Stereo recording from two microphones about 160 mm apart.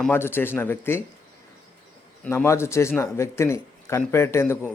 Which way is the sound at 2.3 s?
15° left (ahead or behind).